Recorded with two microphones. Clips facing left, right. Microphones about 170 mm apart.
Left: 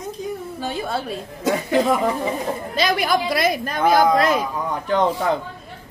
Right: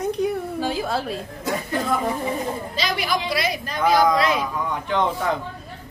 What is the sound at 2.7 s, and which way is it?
A woman's voice, 50° left (ahead or behind).